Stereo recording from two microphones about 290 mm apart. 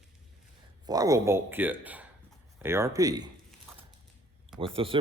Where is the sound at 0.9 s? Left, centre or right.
Centre.